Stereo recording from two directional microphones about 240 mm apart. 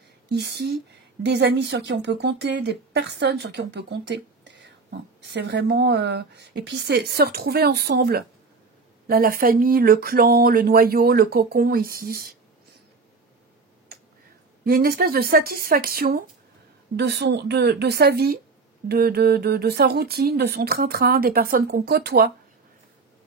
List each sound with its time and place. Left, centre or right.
0.3 s speech: right
14.6 s speech: right